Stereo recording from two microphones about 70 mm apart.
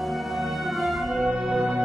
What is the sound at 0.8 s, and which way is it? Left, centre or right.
Music, centre.